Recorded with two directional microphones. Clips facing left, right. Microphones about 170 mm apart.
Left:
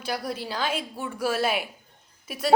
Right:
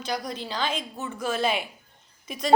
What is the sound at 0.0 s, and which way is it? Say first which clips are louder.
A woman's voice: left 1 dB; 5° left (ahead or behind).